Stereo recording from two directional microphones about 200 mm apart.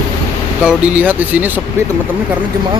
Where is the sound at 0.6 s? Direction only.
5° right (ahead or behind).